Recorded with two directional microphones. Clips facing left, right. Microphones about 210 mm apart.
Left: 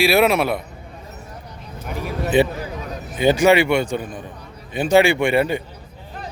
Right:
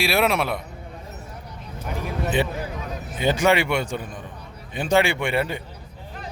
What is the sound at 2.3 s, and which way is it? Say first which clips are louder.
A man's voice: left 10 dB; 10° left (ahead or behind).